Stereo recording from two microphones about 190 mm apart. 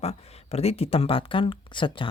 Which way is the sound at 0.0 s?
35° left (ahead or behind).